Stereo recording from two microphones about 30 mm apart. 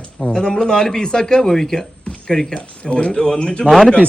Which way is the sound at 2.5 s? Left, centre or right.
Left.